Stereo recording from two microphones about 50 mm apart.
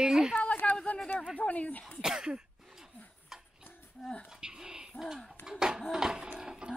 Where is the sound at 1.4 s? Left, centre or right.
Left.